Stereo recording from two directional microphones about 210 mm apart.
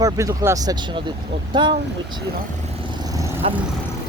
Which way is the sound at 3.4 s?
25° right (ahead or behind).